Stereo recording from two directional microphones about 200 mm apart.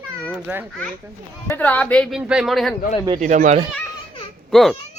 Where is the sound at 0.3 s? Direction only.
5° right (ahead or behind).